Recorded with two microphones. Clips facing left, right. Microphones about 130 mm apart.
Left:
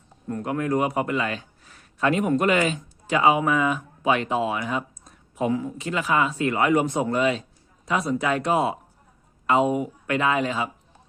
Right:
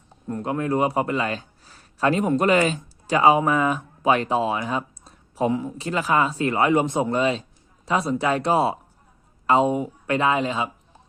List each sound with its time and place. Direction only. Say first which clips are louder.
0.3 s a man's voice: right 1 dB; 25° right (ahead or behind)
5.5 s speech: even; 20° right (ahead or behind)
5.7 s speech: right 2 dB; 35° right (ahead or behind)